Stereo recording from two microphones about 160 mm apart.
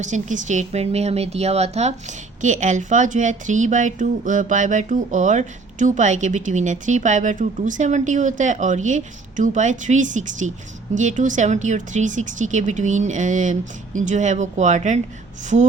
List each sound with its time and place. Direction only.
0.0 s speech: 50° right (ahead or behind)